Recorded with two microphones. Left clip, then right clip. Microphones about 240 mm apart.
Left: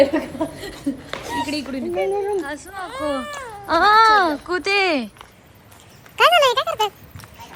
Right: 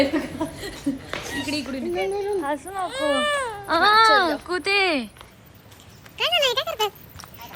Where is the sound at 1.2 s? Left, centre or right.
Left.